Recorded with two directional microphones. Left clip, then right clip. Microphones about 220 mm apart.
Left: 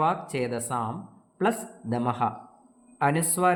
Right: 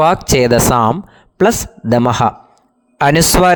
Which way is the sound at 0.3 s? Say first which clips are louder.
Right 19 dB; 50° right (ahead or behind).